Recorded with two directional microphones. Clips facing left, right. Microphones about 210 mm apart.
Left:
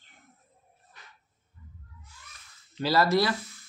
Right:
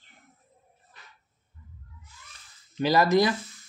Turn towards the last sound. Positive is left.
turn(degrees=-15)  # may be behind; listen again after turning